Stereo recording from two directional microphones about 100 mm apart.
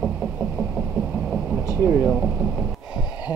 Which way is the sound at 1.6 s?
20° right (ahead or behind).